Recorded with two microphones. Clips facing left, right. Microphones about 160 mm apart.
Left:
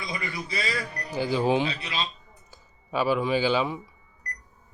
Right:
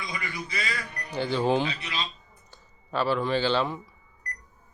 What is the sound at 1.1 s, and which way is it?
Speech, 5° left (ahead or behind).